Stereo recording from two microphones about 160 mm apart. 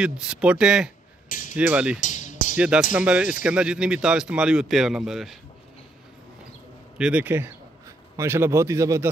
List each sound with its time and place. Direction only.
0.0 s a man's voice: 5° right (ahead or behind)
2.0 s music: 50° left (ahead or behind)
2.5 s a man's voice: 5° right (ahead or behind)
7.0 s speech: 10° right (ahead or behind)